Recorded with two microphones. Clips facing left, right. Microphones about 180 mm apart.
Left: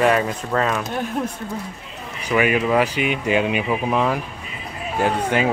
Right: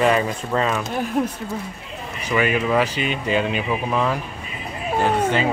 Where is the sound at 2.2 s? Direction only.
10° left (ahead or behind).